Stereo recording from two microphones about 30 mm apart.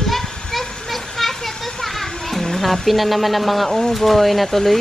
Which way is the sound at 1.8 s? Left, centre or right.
Centre.